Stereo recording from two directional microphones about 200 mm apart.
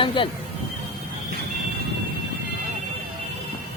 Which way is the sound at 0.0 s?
25° left (ahead or behind).